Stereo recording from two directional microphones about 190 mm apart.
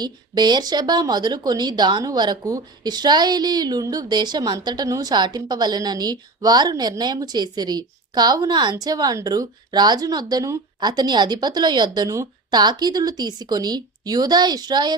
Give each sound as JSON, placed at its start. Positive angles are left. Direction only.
{"t": 0.0, "sound": "speech", "side_deg": -20}